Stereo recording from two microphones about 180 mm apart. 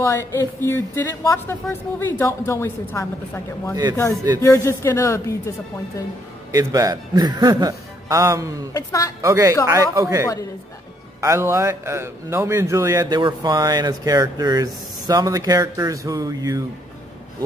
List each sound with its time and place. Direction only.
0.0 s speech: 15° left (ahead or behind)
6.5 s a man's voice: 20° right (ahead or behind)
8.7 s speech: 20° left (ahead or behind)
9.2 s a man's voice: 15° right (ahead or behind)